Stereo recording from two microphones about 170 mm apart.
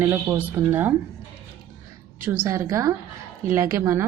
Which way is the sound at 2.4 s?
20° right (ahead or behind).